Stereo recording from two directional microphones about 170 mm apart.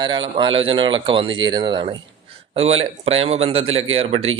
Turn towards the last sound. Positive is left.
turn(degrees=-35)  # may be behind; listen again after turning